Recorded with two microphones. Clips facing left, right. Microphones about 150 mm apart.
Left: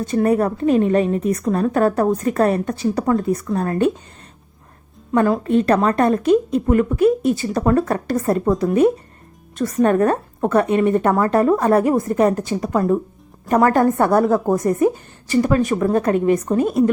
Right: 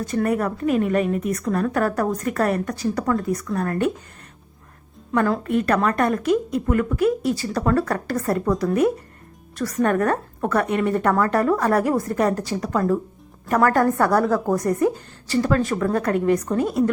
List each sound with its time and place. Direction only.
0.0 s a woman's voice: 25° left (ahead or behind)
5.1 s a woman's voice: 20° left (ahead or behind)